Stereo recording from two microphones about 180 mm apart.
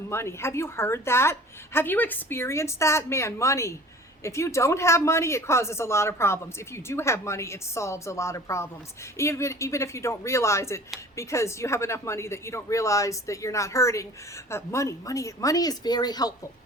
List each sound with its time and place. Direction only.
0.1 s a woman's voice: 15° left (ahead or behind)